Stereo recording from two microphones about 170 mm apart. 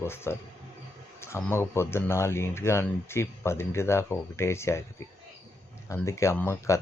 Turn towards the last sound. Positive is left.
turn(degrees=15)  # may be behind; listen again after turning